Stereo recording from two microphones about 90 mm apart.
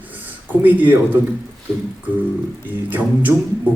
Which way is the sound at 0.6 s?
20° right (ahead or behind).